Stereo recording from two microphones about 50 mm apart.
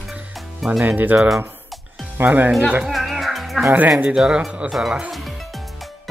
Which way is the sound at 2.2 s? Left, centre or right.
Right.